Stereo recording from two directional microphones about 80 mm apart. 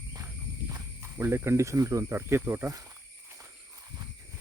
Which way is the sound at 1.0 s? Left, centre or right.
Right.